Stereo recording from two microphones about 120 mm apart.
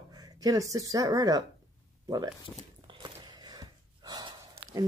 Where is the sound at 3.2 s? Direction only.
35° right (ahead or behind).